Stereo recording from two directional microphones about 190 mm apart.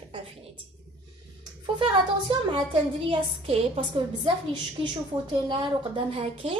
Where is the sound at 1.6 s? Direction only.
25° right (ahead or behind).